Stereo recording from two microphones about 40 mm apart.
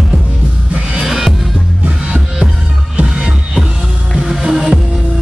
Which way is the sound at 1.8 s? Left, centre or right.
Right.